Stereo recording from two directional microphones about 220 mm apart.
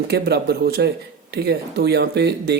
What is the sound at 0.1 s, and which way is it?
Speech, 45° right (ahead or behind).